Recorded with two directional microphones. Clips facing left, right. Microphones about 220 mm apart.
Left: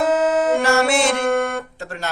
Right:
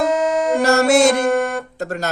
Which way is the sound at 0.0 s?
5° left (ahead or behind).